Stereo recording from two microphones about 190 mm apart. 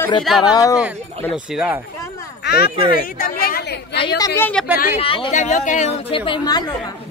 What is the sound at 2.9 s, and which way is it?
A woman's voice, 50° left (ahead or behind).